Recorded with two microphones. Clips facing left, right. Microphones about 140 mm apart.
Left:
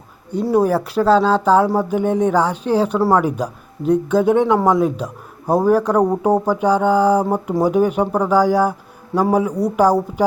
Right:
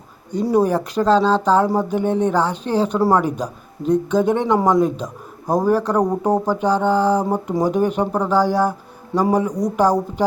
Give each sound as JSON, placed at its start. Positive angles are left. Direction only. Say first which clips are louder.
{"t": 0.3, "sound": "speech", "louder": "left 1 dB", "side_deg": 5}